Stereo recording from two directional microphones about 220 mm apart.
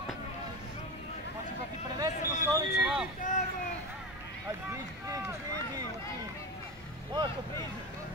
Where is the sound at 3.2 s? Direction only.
35° left (ahead or behind).